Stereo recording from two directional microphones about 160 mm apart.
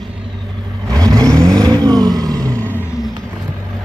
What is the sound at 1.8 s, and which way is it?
Vehicle, 25° right (ahead or behind).